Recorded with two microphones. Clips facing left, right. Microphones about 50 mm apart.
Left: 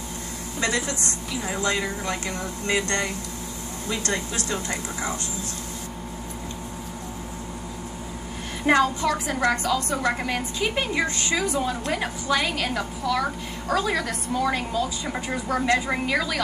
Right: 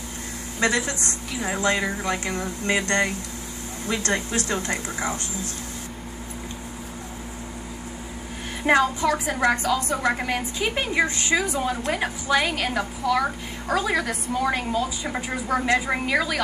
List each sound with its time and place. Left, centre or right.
0.6 s a woman's voice: right
8.6 s a woman's voice: centre